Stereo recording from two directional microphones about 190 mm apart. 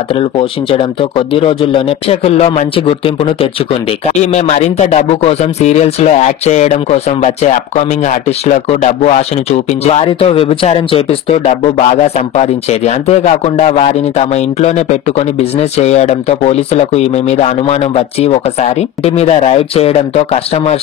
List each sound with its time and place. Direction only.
0.1 s speech: 30° left (ahead or behind)
4.1 s speech: 35° left (ahead or behind)